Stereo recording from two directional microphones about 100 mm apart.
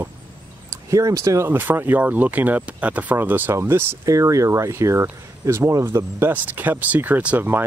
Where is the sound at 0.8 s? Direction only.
35° right (ahead or behind).